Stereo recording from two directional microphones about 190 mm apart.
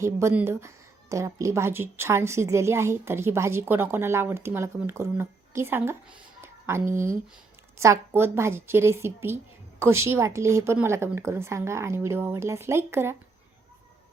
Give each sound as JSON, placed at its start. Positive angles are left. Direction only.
{"t": 0.0, "sound": "a woman's voice", "side_deg": -15}
{"t": 6.9, "sound": "speech", "side_deg": -45}
{"t": 7.8, "sound": "a woman's voice", "side_deg": -15}